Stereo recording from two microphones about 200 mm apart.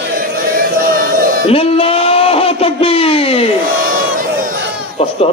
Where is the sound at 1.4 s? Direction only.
30° left (ahead or behind).